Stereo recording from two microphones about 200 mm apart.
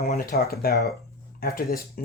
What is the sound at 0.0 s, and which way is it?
Speech, 50° left (ahead or behind).